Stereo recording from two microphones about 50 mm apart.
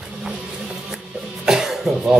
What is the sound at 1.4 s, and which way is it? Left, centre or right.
Cough, centre.